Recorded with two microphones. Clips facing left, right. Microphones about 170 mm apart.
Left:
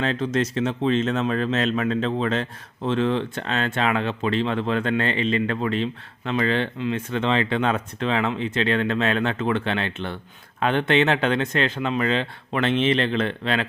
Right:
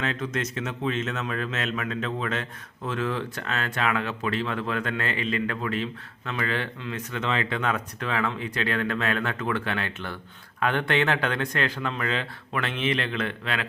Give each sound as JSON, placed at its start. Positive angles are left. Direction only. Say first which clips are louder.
{"t": 0.0, "sound": "speech", "louder": "left 6 dB", "side_deg": 30}